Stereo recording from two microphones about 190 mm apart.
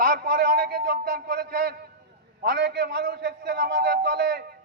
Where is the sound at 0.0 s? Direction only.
55° right (ahead or behind).